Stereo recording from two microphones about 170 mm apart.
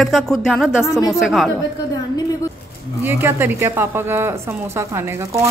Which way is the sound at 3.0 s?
15° right (ahead or behind).